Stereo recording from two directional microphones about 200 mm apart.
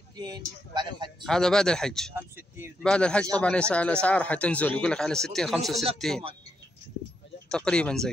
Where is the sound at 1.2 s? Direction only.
Centre (ahead or behind).